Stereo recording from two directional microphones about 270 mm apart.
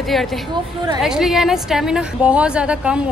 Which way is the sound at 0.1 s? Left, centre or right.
Centre.